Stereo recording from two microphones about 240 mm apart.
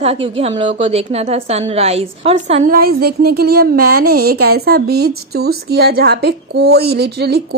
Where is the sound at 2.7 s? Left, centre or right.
Right.